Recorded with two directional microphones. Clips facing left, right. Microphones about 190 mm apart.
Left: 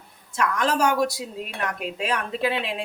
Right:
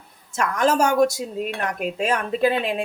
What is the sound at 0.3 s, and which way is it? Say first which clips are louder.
Speech: right 3 dB; 45° right (ahead or behind).